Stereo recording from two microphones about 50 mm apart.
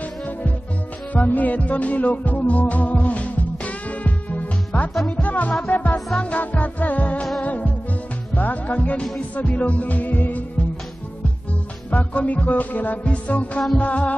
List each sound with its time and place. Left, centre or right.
1.1 s music: left
5.9 s music: centre
6.3 s music: left
11.9 s music: left